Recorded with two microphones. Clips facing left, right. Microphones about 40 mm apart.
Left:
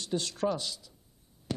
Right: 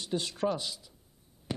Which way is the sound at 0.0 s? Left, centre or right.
Centre.